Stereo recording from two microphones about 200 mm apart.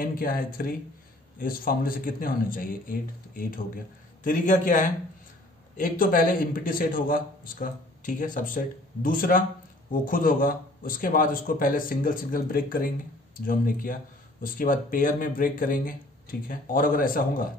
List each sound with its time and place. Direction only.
0.0 s a man's voice: 45° left (ahead or behind)